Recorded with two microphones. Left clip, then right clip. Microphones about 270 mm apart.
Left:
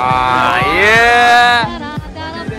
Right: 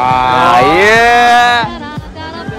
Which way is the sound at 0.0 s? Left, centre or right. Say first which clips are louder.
Right 3 dB; centre.